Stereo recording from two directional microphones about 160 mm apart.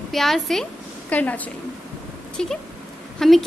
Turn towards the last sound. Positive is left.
turn(degrees=0)  # may be behind; listen again after turning